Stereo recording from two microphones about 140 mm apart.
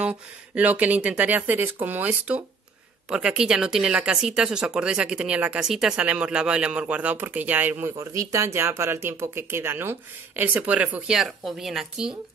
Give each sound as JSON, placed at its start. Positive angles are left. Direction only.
{"t": 0.0, "sound": "speech", "side_deg": -10}